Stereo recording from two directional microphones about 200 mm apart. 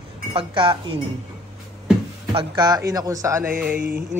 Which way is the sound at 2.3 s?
25° right (ahead or behind).